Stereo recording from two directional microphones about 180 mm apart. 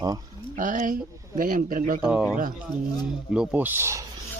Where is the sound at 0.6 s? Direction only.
45° right (ahead or behind).